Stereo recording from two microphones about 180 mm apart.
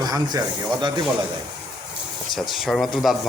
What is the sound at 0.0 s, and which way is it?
Speech, 20° right (ahead or behind).